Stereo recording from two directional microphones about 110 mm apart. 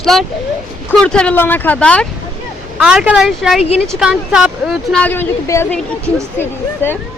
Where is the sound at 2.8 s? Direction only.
5° right (ahead or behind).